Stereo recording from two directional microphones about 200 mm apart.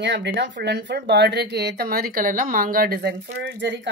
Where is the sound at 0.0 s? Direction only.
60° right (ahead or behind).